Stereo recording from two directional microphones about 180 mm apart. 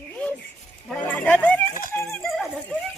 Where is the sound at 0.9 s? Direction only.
10° left (ahead or behind).